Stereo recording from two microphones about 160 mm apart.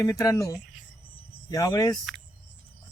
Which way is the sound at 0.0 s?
25° left (ahead or behind).